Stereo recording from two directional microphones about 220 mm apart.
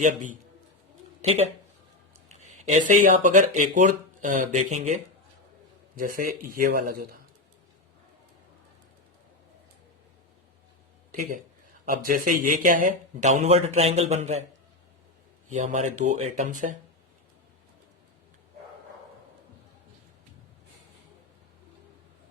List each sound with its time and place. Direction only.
0.0 s speech: 35° right (ahead or behind)
6.0 s speech: 40° right (ahead or behind)
11.1 s speech: 40° right (ahead or behind)
15.5 s speech: 35° right (ahead or behind)